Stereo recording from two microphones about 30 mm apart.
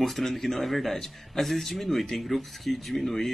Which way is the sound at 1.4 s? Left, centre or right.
Centre.